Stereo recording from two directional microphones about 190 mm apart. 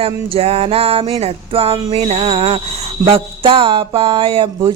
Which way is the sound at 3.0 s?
30° right (ahead or behind).